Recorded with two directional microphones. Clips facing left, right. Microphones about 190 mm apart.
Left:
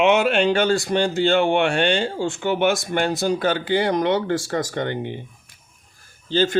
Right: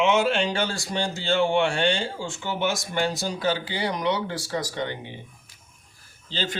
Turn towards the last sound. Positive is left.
turn(degrees=50)  # may be behind; listen again after turning